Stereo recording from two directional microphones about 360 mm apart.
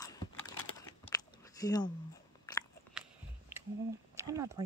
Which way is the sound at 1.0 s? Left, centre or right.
Centre.